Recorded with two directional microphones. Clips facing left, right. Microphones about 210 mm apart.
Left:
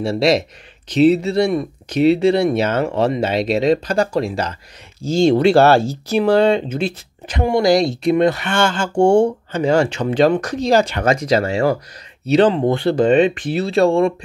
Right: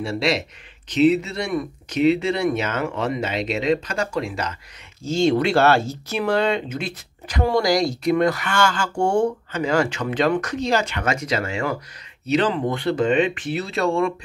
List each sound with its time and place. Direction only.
0.0 s speech: 35° left (ahead or behind)